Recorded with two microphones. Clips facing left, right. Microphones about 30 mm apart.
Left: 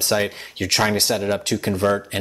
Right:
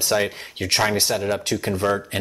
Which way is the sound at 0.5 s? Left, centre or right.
Left.